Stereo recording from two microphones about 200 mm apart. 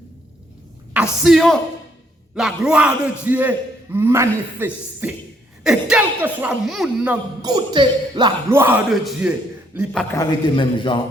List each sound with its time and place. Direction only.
1.2 s speech: centre (ahead or behind)
7.4 s speech: 20° right (ahead or behind)
8.4 s speech: 10° right (ahead or behind); by 10.2 s 5° left (ahead or behind)
10.2 s a man's voice: 25° left (ahead or behind)